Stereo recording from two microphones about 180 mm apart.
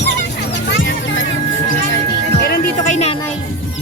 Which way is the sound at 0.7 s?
90° left.